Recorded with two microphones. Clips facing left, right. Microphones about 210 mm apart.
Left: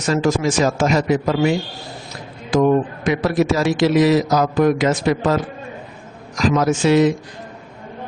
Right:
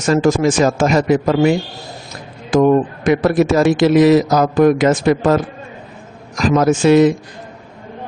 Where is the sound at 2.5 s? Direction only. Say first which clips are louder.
Right 3 dB; 50° right (ahead or behind).